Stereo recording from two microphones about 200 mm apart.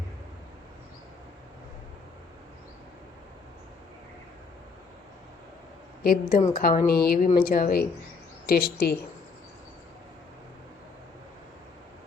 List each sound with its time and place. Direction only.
6.0 s speech: 45° left (ahead or behind)